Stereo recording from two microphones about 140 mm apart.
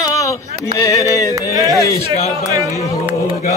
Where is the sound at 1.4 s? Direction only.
25° right (ahead or behind).